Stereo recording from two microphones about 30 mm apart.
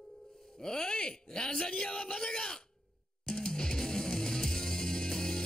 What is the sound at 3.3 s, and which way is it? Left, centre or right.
Music, left.